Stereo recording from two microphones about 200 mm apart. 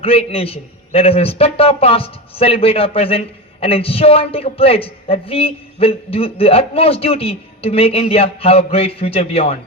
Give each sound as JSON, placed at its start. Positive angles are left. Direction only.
{"t": 0.0, "sound": "a man's voice", "side_deg": 30}